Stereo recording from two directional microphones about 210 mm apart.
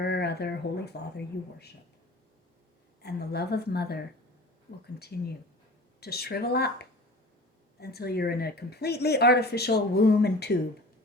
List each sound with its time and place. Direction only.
0.0 s speech: 50° left (ahead or behind)
3.0 s speech: 50° left (ahead or behind)
7.8 s speech: 50° left (ahead or behind)